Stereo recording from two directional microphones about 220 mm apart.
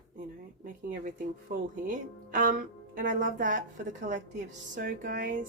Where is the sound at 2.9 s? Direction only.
40° right (ahead or behind).